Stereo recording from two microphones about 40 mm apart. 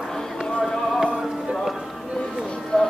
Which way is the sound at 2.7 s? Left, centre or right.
Centre.